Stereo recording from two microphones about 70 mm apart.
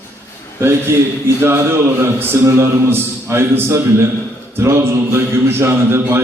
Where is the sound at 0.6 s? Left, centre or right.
Right.